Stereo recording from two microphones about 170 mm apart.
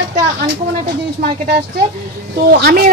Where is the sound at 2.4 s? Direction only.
65° right (ahead or behind).